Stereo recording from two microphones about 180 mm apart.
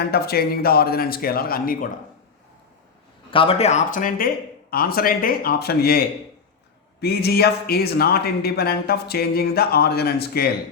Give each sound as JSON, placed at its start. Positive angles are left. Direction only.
{"t": 0.1, "sound": "speech", "side_deg": 60}
{"t": 3.3, "sound": "speech", "side_deg": 30}